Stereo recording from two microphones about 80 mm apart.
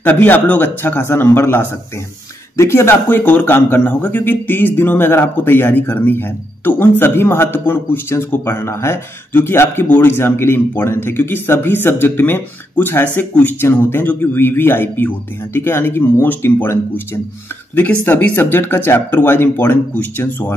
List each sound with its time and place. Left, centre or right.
0.0 s a man's voice: left